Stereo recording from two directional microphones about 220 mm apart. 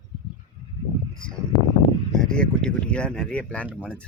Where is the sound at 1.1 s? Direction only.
5° left (ahead or behind).